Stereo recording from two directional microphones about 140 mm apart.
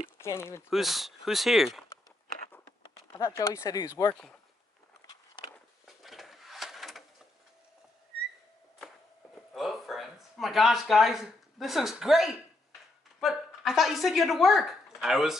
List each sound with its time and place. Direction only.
0.2 s speech: 20° left (ahead or behind)
0.7 s speech: centre (ahead or behind)
3.2 s speech: 20° left (ahead or behind)
5.9 s a sound: centre (ahead or behind)
9.5 s speech: centre (ahead or behind)